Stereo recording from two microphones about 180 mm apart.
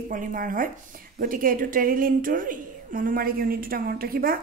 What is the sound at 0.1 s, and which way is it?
A woman's voice, 50° right (ahead or behind).